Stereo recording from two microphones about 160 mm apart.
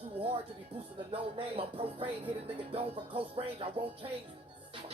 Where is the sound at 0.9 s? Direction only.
35° right (ahead or behind).